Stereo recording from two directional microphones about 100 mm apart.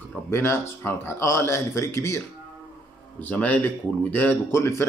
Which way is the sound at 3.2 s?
15° left (ahead or behind).